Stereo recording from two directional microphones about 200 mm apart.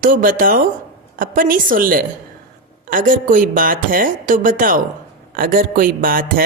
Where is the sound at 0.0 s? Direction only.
45° right (ahead or behind).